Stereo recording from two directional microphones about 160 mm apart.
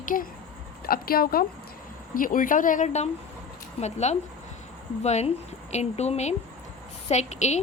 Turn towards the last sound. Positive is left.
turn(degrees=45)  # may be behind; listen again after turning